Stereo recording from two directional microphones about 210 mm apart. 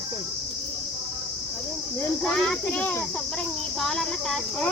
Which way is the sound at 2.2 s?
5° left (ahead or behind).